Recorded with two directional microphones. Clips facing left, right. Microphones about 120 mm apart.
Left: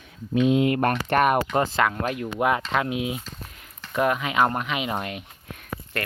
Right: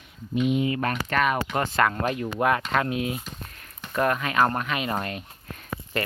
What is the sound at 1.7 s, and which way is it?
Speech, 5° left (ahead or behind).